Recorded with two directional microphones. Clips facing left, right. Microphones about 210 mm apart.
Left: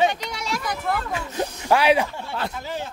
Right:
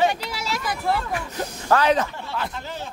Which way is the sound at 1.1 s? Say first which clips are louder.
Left 2 dB; 15° left (ahead or behind).